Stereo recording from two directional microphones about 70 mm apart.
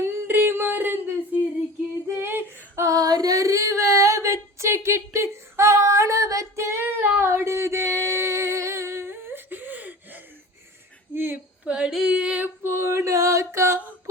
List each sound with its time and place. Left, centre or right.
0.0 s music: right
2.1 s female singing: right
2.7 s female singing: right
6.8 s a sound: right
11.6 s female singing: centre
12.6 s a sound: right